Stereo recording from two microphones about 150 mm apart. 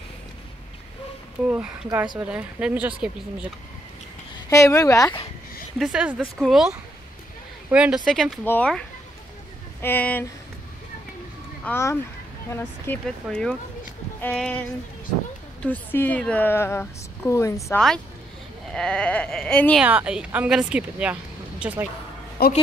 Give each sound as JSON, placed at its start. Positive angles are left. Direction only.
{"t": 1.4, "sound": "a woman's voice", "side_deg": -10}
{"t": 4.5, "sound": "speech", "side_deg": 20}
{"t": 5.8, "sound": "a woman's voice", "side_deg": -5}
{"t": 11.6, "sound": "a woman's voice", "side_deg": 15}
{"t": 13.0, "sound": "a woman's voice", "side_deg": 5}
{"t": 15.6, "sound": "a woman's voice", "side_deg": 10}
{"t": 17.7, "sound": "a woman's voice", "side_deg": 5}
{"t": 19.8, "sound": "a woman's voice", "side_deg": -10}
{"t": 22.4, "sound": "a woman's voice", "side_deg": 90}